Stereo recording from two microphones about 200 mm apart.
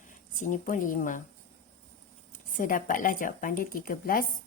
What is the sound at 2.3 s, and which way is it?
Speech, 40° left (ahead or behind).